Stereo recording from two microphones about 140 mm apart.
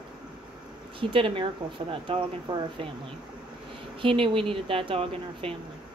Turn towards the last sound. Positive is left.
turn(degrees=-40)  # may be behind; listen again after turning